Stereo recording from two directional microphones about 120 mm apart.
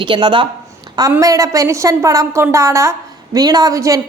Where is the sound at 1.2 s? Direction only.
25° right (ahead or behind).